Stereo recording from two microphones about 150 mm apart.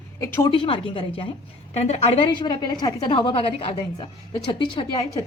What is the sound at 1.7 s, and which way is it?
A woman's voice, 45° left (ahead or behind).